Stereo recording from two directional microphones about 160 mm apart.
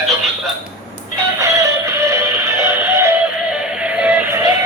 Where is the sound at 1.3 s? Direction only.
20° right (ahead or behind).